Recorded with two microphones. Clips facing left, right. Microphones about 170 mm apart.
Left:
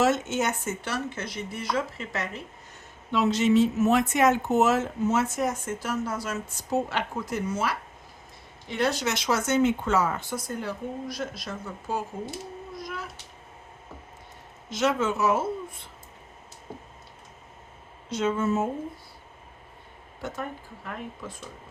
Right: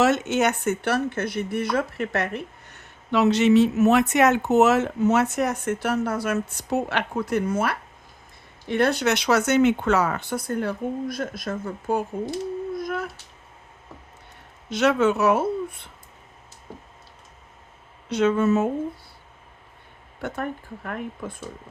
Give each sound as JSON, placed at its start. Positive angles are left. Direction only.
{"t": 0.0, "sound": "speech", "side_deg": -70}
{"t": 14.7, "sound": "speech", "side_deg": -65}
{"t": 18.1, "sound": "speech", "side_deg": -70}
{"t": 20.2, "sound": "speech", "side_deg": -60}